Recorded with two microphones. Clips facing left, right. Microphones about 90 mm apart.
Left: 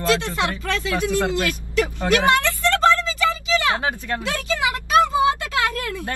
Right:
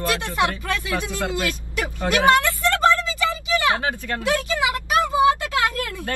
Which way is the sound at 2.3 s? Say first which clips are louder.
Right 1 dB; 20° right (ahead or behind).